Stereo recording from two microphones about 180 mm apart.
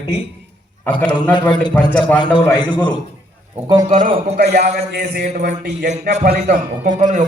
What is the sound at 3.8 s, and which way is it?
Speech, 45° right (ahead or behind).